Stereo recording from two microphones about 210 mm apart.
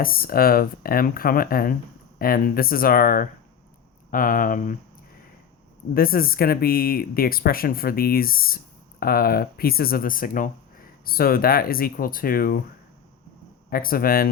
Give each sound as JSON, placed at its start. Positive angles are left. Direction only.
{"t": 0.0, "sound": "speech", "side_deg": 45}
{"t": 5.9, "sound": "speech", "side_deg": 45}
{"t": 13.7, "sound": "speech", "side_deg": 45}